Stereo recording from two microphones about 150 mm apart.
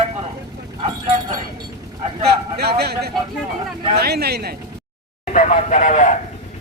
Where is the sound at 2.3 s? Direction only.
90° right.